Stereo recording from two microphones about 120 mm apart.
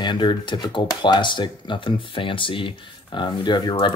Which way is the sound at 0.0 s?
40° left (ahead or behind).